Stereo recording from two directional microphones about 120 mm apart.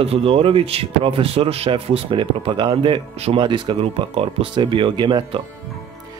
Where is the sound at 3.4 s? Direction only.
40° right (ahead or behind).